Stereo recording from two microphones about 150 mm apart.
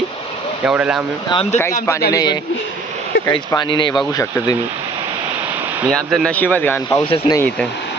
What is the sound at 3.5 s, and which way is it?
Speech, 30° left (ahead or behind).